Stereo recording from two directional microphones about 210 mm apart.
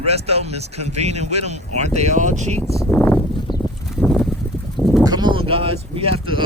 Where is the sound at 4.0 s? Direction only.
Centre (ahead or behind).